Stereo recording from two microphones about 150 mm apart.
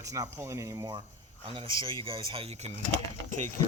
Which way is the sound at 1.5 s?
35° right (ahead or behind).